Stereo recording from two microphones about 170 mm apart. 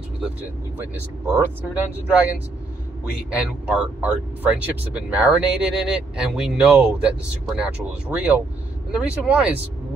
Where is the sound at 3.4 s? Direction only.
5° right (ahead or behind).